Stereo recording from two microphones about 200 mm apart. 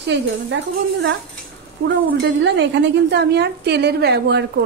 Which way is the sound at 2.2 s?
65° right (ahead or behind).